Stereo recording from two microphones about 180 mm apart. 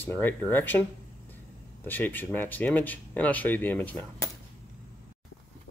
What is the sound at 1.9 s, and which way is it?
Speech, 10° left (ahead or behind).